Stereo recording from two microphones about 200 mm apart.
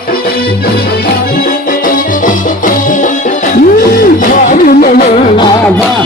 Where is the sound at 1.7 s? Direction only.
45° left (ahead or behind).